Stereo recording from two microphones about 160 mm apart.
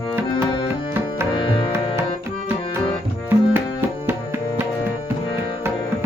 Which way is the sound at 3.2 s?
15° right (ahead or behind).